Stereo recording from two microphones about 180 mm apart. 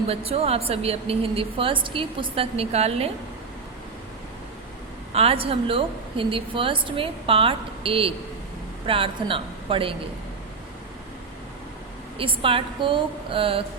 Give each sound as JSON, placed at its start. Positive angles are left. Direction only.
{"t": 0.1, "sound": "a woman's voice", "side_deg": -35}
{"t": 5.1, "sound": "a woman's voice", "side_deg": -35}
{"t": 12.1, "sound": "a woman's voice", "side_deg": -30}